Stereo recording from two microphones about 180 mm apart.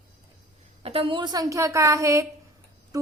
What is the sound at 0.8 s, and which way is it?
A woman's voice, 30° right (ahead or behind).